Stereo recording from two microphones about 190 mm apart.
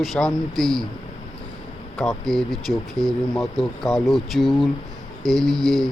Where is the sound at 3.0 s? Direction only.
Centre (ahead or behind).